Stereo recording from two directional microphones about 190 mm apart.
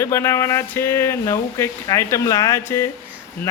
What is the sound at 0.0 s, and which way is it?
Speech, 15° left (ahead or behind).